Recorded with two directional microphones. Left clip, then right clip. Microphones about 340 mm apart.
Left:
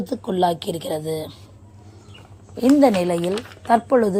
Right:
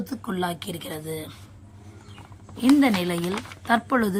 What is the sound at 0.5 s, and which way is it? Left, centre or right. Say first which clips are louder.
Speech: left 9 dB; centre.